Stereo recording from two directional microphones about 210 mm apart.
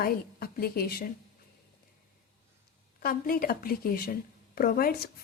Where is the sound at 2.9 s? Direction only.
45° left (ahead or behind).